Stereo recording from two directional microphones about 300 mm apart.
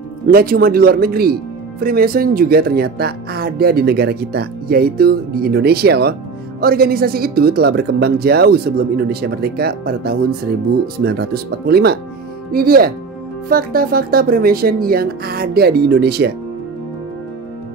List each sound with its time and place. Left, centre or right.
0.3 s speech: right